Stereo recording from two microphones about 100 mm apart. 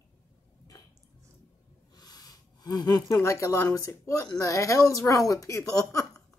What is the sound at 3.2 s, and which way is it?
Speech, 30° left (ahead or behind).